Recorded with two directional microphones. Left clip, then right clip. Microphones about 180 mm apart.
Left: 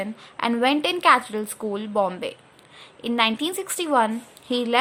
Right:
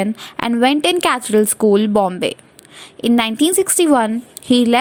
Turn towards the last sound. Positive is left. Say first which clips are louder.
# right 8 dB
turn(degrees=-40)  # may be behind; listen again after turning